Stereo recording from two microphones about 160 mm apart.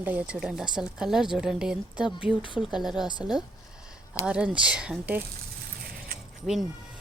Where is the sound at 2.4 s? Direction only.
30° left (ahead or behind).